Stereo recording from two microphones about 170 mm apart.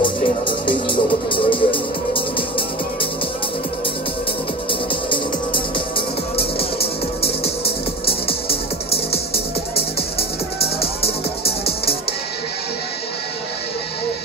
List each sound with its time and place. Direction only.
0.0 s music: 30° left (ahead or behind)
5.1 s music: 30° left (ahead or behind)